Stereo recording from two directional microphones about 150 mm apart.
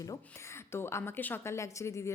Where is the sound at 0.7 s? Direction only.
15° left (ahead or behind).